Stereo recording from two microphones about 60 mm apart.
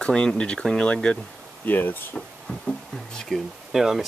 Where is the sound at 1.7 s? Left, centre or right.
Left.